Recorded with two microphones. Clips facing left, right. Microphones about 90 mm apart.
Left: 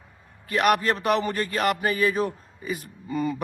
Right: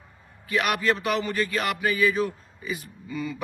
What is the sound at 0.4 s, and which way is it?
Speech, 50° left (ahead or behind).